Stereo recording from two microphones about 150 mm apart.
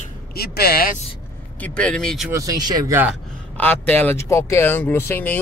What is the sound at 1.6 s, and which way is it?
Speech, 5° left (ahead or behind).